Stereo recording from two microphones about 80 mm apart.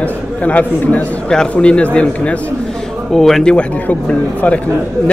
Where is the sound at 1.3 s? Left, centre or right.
Centre.